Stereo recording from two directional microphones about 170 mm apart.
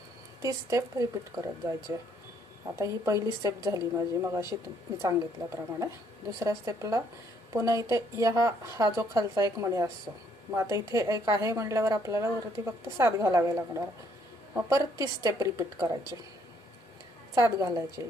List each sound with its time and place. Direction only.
0.4 s a woman's voice: 20° right (ahead or behind)
2.7 s a woman's voice: 20° right (ahead or behind)
17.3 s a woman's voice: 20° right (ahead or behind)